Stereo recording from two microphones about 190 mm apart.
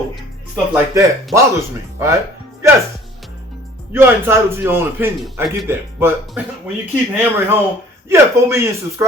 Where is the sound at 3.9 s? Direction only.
10° right (ahead or behind).